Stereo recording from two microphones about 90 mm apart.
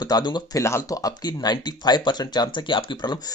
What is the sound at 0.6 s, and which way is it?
Speech, 30° left (ahead or behind).